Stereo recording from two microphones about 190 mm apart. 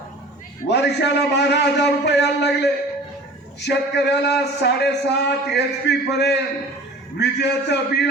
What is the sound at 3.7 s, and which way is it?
A man's voice, 65° left (ahead or behind).